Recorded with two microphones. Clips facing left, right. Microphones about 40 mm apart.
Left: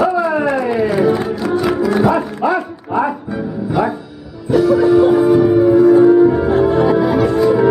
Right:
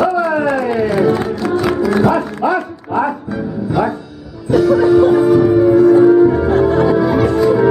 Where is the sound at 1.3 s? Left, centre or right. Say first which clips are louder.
Even; centre.